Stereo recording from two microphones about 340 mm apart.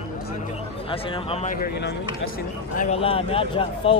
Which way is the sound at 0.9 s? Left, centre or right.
Centre.